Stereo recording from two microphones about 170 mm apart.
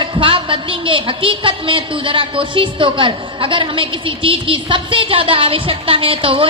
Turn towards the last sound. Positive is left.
turn(degrees=-30)  # may be behind; listen again after turning